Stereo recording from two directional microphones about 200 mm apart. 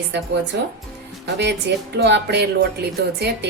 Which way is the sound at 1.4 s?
60° right (ahead or behind).